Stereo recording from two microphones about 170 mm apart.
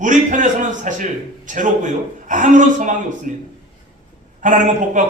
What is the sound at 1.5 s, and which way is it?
A man's voice, 50° right (ahead or behind).